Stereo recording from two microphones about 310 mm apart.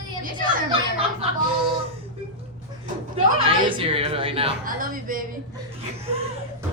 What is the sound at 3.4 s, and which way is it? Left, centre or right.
A woman's voice, centre.